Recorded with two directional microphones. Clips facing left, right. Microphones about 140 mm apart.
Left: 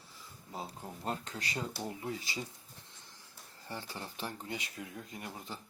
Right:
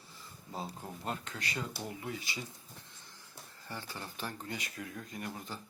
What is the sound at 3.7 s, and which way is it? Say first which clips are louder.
Speech: left 1 dB; 30° left (ahead or behind).